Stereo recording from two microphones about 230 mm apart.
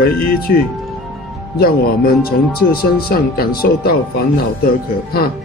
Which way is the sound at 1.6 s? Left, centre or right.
Left.